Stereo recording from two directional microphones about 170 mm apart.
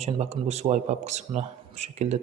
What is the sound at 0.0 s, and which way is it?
Speech, 40° right (ahead or behind).